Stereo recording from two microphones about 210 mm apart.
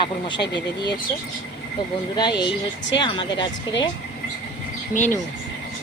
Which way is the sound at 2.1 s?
20° left (ahead or behind).